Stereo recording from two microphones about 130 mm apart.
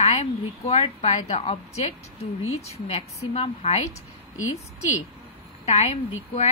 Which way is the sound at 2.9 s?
50° left (ahead or behind).